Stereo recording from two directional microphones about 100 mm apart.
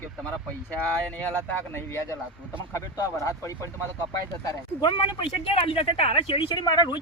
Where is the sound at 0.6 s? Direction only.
15° left (ahead or behind).